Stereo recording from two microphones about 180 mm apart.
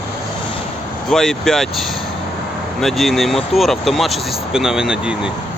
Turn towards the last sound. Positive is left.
turn(degrees=-5)  # may be behind; listen again after turning